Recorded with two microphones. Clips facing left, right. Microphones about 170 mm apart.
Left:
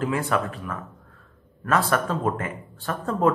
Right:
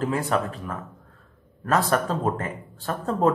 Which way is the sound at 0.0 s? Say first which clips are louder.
Even; 40° right (ahead or behind).